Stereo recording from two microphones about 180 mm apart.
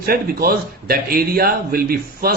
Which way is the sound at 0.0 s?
55° right (ahead or behind).